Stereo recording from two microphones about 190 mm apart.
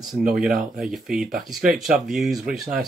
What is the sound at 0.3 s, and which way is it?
Speech, 5° right (ahead or behind).